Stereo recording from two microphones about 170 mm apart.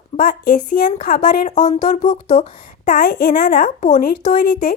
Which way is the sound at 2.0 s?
25° left (ahead or behind).